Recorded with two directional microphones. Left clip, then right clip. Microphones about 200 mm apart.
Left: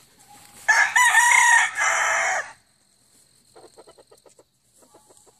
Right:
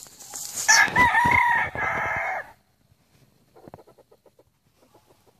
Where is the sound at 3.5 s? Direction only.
45° left (ahead or behind).